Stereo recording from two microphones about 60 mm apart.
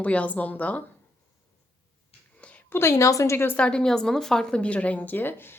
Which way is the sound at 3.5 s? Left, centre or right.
Centre.